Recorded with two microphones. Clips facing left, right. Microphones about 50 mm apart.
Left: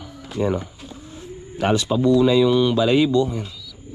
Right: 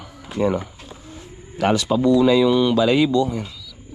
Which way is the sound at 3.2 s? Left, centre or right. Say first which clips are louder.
Right 1 dB; right.